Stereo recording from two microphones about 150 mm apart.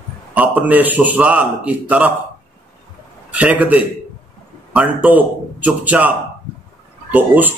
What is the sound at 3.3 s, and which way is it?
A man's voice, 10° right (ahead or behind).